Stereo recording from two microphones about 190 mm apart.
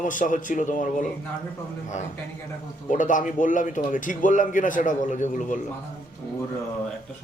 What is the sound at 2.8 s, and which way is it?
A man's voice, 40° left (ahead or behind).